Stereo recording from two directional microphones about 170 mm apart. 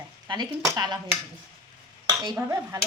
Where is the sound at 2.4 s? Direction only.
15° right (ahead or behind).